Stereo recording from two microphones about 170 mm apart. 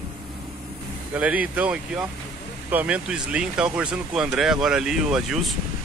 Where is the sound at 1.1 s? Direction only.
10° right (ahead or behind).